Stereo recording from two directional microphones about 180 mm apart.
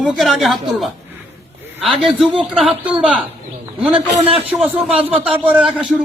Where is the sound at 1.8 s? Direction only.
Centre (ahead or behind).